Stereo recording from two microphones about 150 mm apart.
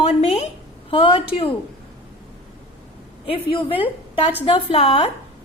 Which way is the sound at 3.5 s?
35° left (ahead or behind).